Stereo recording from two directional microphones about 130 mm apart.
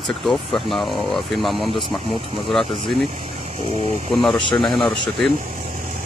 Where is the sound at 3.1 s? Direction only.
65° right (ahead or behind).